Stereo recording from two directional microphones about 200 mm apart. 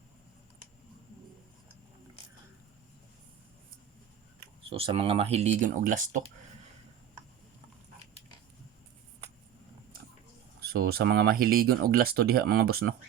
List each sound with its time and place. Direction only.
4.7 s speech: 30° right (ahead or behind)
10.6 s speech: 50° right (ahead or behind)